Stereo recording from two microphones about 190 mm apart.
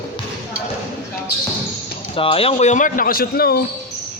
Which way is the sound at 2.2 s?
30° left (ahead or behind).